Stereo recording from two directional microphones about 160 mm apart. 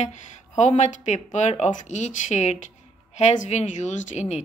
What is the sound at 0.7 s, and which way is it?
Speech, 45° left (ahead or behind).